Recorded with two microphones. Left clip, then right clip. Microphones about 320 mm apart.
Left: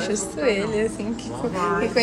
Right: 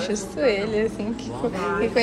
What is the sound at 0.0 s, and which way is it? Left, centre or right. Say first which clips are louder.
Speech: even; centre.